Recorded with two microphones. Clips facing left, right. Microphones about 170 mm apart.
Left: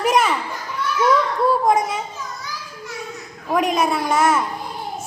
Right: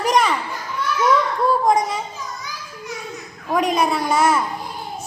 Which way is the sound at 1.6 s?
5° left (ahead or behind).